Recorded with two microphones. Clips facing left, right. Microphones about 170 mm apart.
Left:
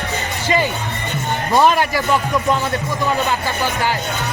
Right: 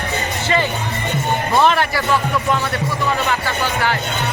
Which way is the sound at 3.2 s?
15° left (ahead or behind).